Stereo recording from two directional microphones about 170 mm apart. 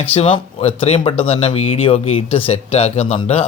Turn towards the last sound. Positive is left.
turn(degrees=35)  # may be behind; listen again after turning